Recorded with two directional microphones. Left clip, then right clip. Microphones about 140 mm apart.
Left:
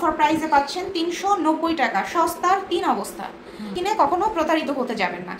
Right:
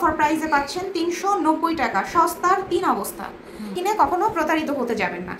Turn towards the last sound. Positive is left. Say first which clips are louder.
# even
turn(degrees=30)  # may be behind; listen again after turning